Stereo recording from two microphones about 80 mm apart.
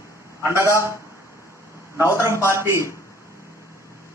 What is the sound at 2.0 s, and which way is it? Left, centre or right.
Speech, right.